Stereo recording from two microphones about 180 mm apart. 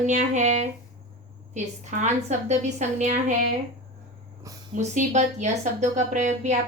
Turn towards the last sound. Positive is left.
turn(degrees=-40)  # may be behind; listen again after turning